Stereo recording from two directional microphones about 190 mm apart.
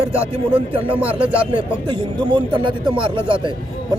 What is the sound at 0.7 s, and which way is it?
A man's voice, 30° right (ahead or behind).